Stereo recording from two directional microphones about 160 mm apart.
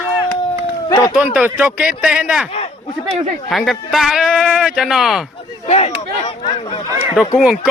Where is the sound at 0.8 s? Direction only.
25° left (ahead or behind).